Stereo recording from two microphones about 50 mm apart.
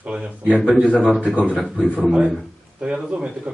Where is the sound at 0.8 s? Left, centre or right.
Left.